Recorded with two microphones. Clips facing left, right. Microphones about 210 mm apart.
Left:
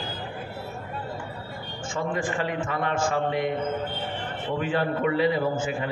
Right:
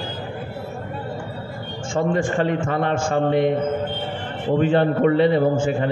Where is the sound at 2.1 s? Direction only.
30° right (ahead or behind).